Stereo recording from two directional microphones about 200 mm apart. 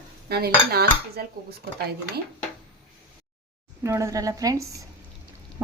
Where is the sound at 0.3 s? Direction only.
50° right (ahead or behind).